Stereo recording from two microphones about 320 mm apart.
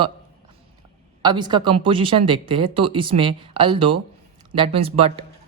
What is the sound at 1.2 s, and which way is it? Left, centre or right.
A woman's voice, centre.